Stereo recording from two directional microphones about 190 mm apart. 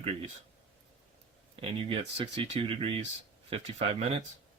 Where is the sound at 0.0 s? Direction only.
30° right (ahead or behind).